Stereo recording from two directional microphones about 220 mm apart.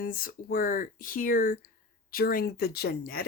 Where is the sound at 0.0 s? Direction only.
40° left (ahead or behind).